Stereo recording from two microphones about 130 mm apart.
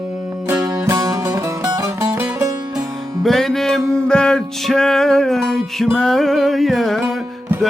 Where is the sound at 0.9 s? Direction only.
25° right (ahead or behind).